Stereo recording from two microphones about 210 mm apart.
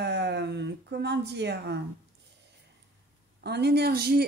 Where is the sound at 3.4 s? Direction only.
50° right (ahead or behind).